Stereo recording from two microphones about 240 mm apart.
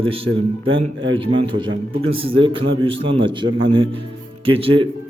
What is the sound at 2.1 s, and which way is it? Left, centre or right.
A man's voice, right.